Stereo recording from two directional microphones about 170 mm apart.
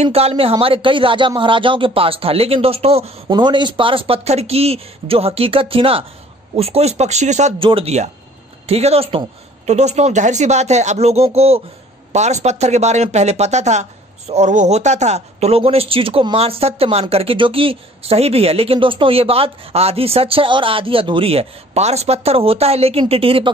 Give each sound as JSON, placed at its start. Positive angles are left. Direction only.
{"t": 0.0, "sound": "speech", "side_deg": -35}
{"t": 7.5, "sound": "speech", "side_deg": -30}